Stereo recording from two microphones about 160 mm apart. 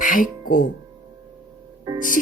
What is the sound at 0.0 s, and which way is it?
Music, 60° left (ahead or behind).